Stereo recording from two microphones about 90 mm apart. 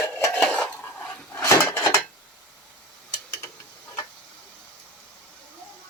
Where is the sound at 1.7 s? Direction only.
25° left (ahead or behind).